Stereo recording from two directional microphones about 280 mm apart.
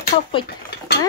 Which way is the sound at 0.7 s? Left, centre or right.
Left.